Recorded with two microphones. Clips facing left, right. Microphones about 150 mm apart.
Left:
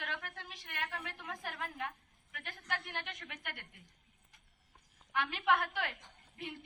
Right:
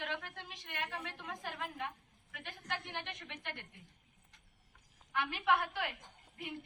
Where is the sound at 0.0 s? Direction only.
20° right (ahead or behind).